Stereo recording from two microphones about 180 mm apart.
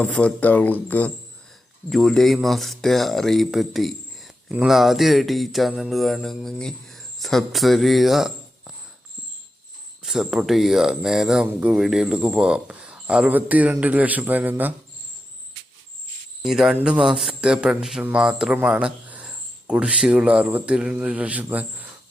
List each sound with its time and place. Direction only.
0.0 s speech: 5° left (ahead or behind)
10.0 s speech: centre (ahead or behind)
16.4 s a man's voice: 5° right (ahead or behind)